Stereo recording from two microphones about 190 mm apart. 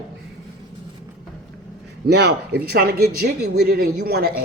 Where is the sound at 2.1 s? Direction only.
60° right (ahead or behind).